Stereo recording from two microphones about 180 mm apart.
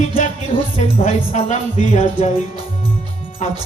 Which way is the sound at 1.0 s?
40° left (ahead or behind).